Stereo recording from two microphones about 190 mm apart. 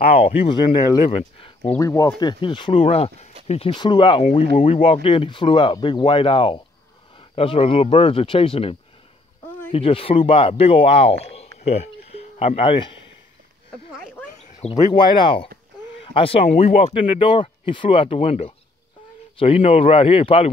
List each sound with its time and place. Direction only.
0.1 s speech: 30° left (ahead or behind)
1.8 s speech: 15° left (ahead or behind)
14.4 s a sound: 40° left (ahead or behind)
14.7 s speech: 20° left (ahead or behind)